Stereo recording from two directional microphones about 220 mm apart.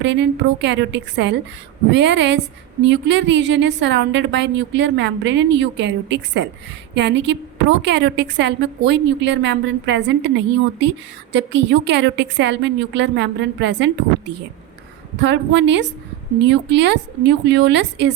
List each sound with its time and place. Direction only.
0.0 s a woman's voice: 55° right (ahead or behind)
15.2 s a woman's voice: 55° right (ahead or behind)